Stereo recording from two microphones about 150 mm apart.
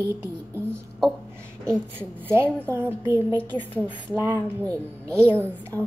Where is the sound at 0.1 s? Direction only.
15° right (ahead or behind).